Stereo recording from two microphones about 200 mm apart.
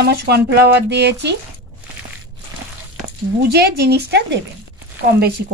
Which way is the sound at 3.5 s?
55° right (ahead or behind).